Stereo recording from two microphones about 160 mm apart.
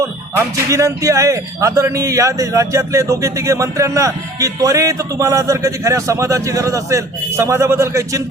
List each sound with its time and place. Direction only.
0.3 s a man's voice: 20° right (ahead or behind)